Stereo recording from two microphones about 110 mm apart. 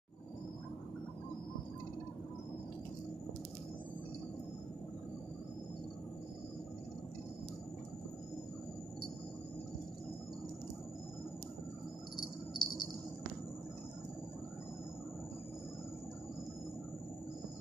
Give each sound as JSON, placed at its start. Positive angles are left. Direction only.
{"t": 12.2, "sound": "cricket", "side_deg": 40}